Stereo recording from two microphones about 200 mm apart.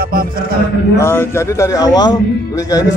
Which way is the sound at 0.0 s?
45° right (ahead or behind).